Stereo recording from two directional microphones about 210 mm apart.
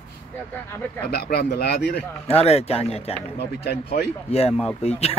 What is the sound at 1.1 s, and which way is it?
Speech, 50° left (ahead or behind).